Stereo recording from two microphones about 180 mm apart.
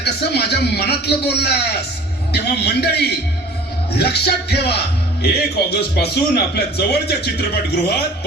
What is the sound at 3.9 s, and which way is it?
A man's voice, 65° left (ahead or behind).